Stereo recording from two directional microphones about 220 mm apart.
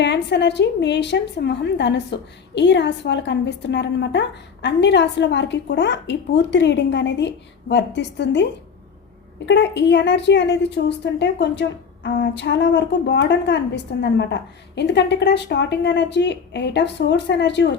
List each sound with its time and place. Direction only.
0.0 s a woman's voice: 50° left (ahead or behind)
9.5 s a woman's voice: 50° left (ahead or behind)